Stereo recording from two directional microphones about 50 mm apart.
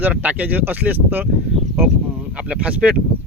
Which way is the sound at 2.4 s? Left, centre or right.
Right.